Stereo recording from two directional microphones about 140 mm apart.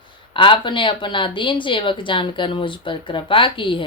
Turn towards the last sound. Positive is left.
turn(degrees=35)  # may be behind; listen again after turning